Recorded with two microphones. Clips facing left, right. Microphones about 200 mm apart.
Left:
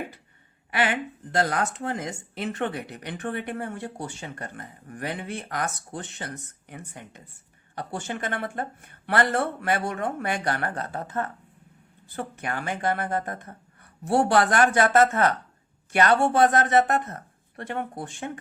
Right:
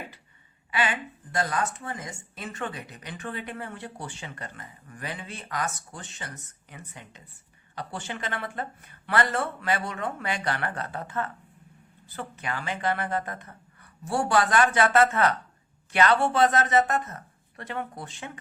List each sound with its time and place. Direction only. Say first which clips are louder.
0.7 s a woman's voice: left 3 dB; 65° left (ahead or behind); by 11.3 s 40° left (ahead or behind)
12.4 s speech: left 1 dB; 50° left (ahead or behind)
14.0 s speech: left 4 dB; 60° left (ahead or behind)